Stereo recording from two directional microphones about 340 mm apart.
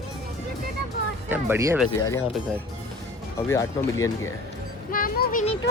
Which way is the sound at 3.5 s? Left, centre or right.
Centre.